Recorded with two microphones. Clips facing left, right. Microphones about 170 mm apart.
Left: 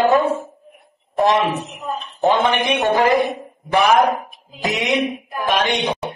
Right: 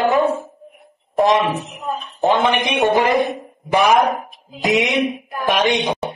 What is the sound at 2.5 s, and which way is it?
Speech, 15° right (ahead or behind).